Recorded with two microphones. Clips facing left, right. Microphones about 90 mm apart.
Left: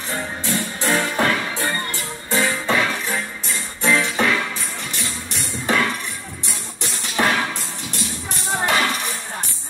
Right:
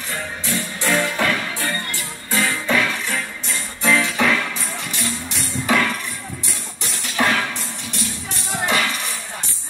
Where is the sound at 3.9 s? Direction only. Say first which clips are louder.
Right 1 dB; 5° left (ahead or behind).